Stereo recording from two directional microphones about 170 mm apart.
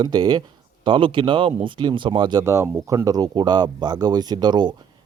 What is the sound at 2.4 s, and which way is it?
Speech, 15° right (ahead or behind).